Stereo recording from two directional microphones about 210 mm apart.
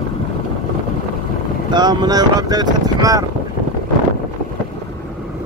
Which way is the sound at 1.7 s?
20° right (ahead or behind).